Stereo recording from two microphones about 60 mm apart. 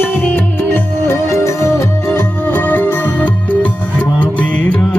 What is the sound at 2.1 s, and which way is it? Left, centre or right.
Music, left.